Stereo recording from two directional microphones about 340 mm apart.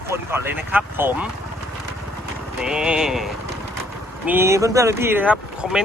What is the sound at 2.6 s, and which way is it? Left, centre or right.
Speech, centre.